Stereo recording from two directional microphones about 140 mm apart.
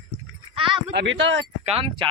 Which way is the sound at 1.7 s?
40° right (ahead or behind).